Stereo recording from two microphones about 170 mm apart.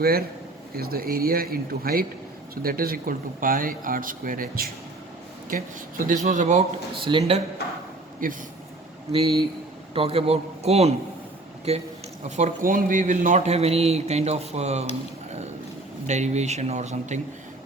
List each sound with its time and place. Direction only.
0.0 s speech: 65° right (ahead or behind); by 6.7 s 45° right (ahead or behind)
7.0 s a man's voice: 35° right (ahead or behind)
8.2 s speech: 55° right (ahead or behind)
9.9 s a man's voice: 35° right (ahead or behind)
12.4 s a man's voice: 55° right (ahead or behind)
16.0 s speech: 40° right (ahead or behind)